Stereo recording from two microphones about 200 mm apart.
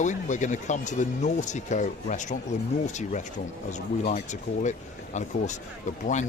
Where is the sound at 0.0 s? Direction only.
35° left (ahead or behind).